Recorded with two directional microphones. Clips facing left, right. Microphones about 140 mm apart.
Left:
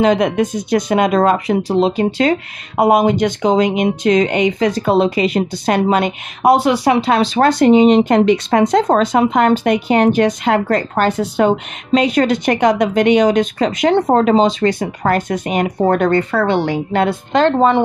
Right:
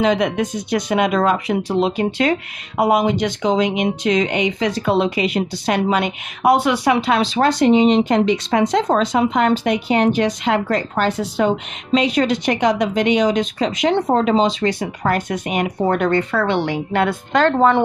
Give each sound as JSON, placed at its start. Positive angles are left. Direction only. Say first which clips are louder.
{"t": 0.0, "sound": "speech", "louder": "left 4 dB", "side_deg": 45}
{"t": 2.8, "sound": "speech", "louder": "left 4 dB", "side_deg": 50}